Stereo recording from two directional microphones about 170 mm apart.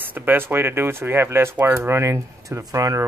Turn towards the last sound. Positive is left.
turn(degrees=-20)  # may be behind; listen again after turning